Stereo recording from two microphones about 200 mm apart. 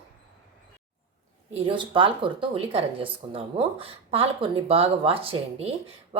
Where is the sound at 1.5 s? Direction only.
30° right (ahead or behind).